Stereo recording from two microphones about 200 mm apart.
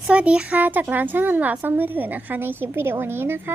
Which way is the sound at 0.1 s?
5° right (ahead or behind).